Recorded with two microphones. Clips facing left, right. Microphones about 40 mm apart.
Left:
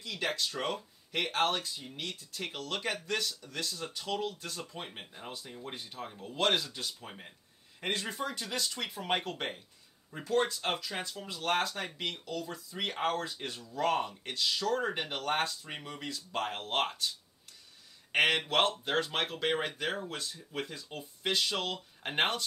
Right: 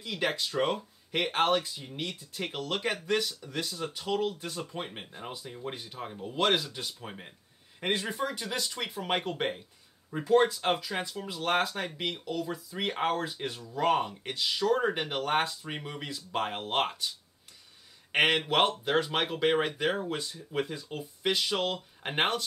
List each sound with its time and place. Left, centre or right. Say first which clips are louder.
0.0 s speech: right 3 dB; right
18.1 s speech: right 2 dB; centre